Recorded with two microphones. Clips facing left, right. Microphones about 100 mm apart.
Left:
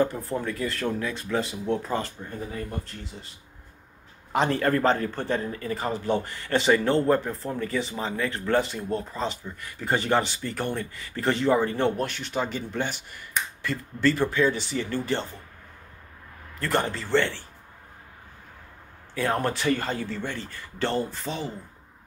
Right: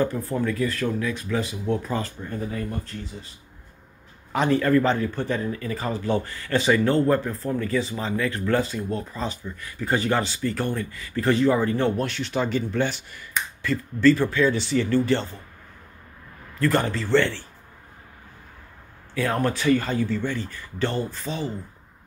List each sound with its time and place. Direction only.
0.0 s speech: 20° left (ahead or behind)
4.3 s speech: 35° left (ahead or behind)
12.0 s speech: 10° left (ahead or behind)
16.5 s speech: 20° left (ahead or behind)
19.1 s speech: 25° left (ahead or behind)